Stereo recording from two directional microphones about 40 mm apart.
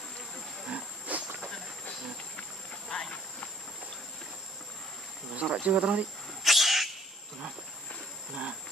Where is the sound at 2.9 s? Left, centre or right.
Left.